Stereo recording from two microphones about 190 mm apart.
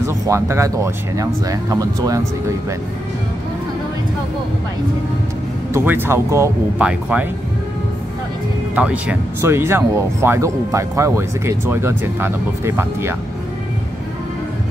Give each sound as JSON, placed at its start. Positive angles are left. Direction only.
{"t": 0.0, "sound": "speech", "side_deg": -15}
{"t": 5.7, "sound": "speech", "side_deg": -10}
{"t": 8.7, "sound": "speech", "side_deg": -5}